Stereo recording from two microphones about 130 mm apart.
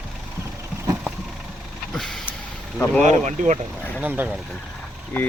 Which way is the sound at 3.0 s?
65° right (ahead or behind).